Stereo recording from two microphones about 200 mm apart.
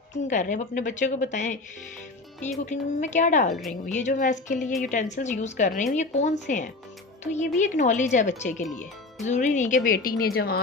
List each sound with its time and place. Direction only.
0.3 s a woman's voice: 40° left (ahead or behind)
7.3 s a woman's voice: 35° left (ahead or behind)